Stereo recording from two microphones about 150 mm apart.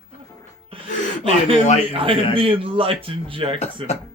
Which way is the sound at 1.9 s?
35° right (ahead or behind).